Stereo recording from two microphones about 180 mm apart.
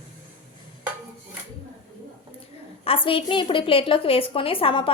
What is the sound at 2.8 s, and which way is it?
A woman's voice, 30° left (ahead or behind).